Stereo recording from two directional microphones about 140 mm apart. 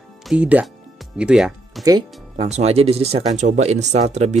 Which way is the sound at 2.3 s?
50° right (ahead or behind).